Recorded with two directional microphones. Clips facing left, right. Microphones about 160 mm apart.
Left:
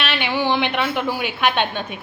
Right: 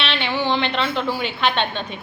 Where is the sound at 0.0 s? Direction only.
10° left (ahead or behind).